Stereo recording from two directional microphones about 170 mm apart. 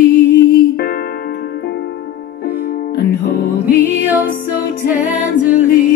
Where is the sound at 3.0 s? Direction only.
75° left (ahead or behind).